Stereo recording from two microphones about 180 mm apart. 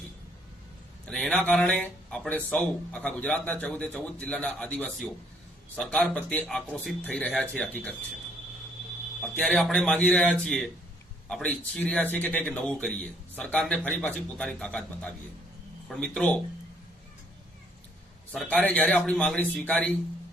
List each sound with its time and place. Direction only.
1.0 s speech: 5° left (ahead or behind)
9.2 s speech: 5° left (ahead or behind)
18.3 s speech: 5° left (ahead or behind)